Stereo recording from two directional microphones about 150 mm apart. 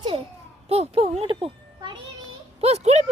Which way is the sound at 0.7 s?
40° right (ahead or behind).